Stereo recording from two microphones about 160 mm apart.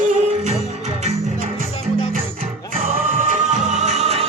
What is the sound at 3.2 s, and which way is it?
Music, 50° right (ahead or behind).